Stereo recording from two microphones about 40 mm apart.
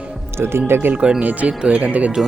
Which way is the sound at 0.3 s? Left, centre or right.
Right.